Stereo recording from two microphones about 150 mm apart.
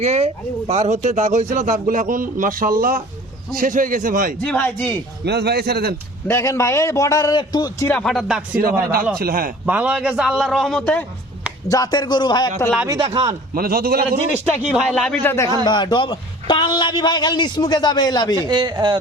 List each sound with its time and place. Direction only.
0.0 s a man's voice: 45° right (ahead or behind); by 4.4 s 65° right (ahead or behind)
4.4 s speech: 10° left (ahead or behind)
5.2 s a man's voice: 90° right
6.2 s a man's voice: 20° left (ahead or behind)
7.9 s a man's voice: 5° left (ahead or behind)
9.1 s a man's voice: 80° right
9.6 s a man's voice: 10° right (ahead or behind); by 11.0 s 10° left (ahead or behind)
11.7 s a man's voice: 25° left (ahead or behind)
12.9 s a man's voice: 30° right (ahead or behind)
13.5 s a man's voice: 80° right
14.3 s speech: 10° right (ahead or behind)
14.9 s speech: 5° left (ahead or behind)
15.6 s a man's voice: 30° left (ahead or behind)
18.3 s speech: 30° right (ahead or behind)